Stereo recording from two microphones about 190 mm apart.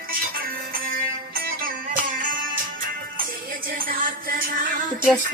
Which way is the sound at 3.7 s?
50° right (ahead or behind).